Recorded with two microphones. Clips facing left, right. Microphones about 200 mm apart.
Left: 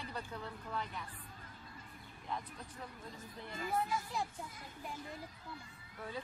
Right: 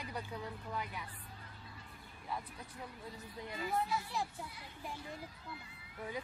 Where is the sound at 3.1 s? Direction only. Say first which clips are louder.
Right 2 dB; 45° left (ahead or behind).